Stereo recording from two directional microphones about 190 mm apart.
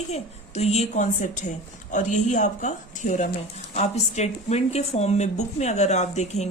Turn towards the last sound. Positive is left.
turn(degrees=35)  # may be behind; listen again after turning